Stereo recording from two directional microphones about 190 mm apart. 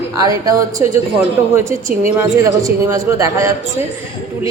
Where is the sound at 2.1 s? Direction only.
15° right (ahead or behind).